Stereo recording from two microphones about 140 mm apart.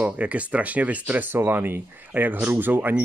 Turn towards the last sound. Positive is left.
turn(degrees=-15)  # may be behind; listen again after turning